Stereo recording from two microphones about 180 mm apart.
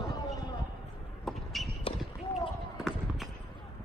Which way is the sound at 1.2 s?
Centre (ahead or behind).